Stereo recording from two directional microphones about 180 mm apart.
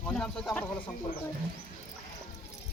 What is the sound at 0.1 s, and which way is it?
Speech, 5° left (ahead or behind).